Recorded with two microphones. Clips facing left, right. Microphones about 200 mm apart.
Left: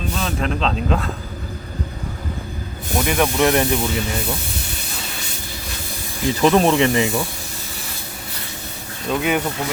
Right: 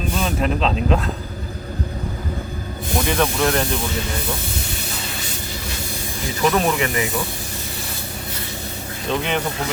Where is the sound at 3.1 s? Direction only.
10° left (ahead or behind).